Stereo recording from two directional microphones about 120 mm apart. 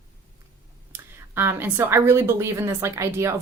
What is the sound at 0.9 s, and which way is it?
A woman's voice, 20° right (ahead or behind).